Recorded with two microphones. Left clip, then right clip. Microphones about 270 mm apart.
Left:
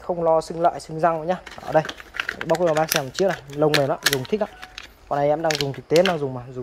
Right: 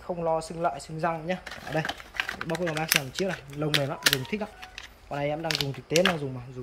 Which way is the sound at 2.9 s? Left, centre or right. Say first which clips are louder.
Left 5 dB; centre.